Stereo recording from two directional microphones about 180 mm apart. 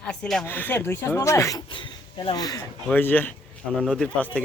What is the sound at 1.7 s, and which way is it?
Speech, 25° left (ahead or behind).